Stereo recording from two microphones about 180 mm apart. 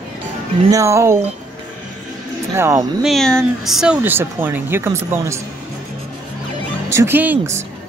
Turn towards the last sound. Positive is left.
turn(degrees=-10)  # may be behind; listen again after turning